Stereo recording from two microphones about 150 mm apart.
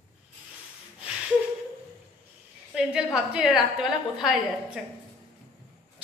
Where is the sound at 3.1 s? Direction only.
5° right (ahead or behind).